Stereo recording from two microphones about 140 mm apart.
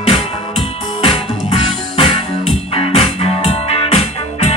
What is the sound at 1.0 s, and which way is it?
Music, 40° left (ahead or behind).